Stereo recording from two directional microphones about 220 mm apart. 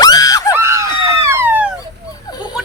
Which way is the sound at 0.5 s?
10° right (ahead or behind).